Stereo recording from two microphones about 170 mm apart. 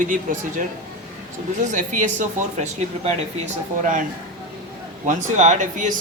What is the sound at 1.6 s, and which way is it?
Speech, 50° right (ahead or behind).